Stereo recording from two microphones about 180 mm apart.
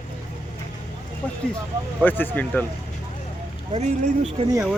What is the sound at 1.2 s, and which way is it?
Speech, 5° left (ahead or behind).